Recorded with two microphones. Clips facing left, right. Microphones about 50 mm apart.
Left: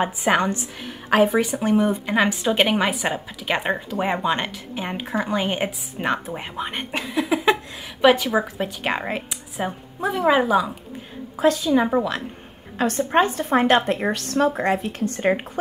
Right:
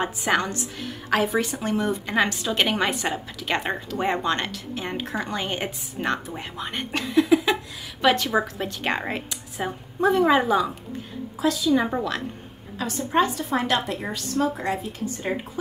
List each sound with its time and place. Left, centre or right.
0.0 s a woman's voice: centre
7.3 s a sound: centre
8.0 s a woman's voice: centre
11.3 s a woman's voice: left
11.7 s a woman's voice: centre
12.7 s a woman's voice: left
14.1 s a woman's voice: left